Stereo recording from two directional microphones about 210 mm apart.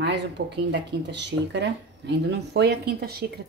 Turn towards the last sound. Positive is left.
turn(degrees=-50)  # may be behind; listen again after turning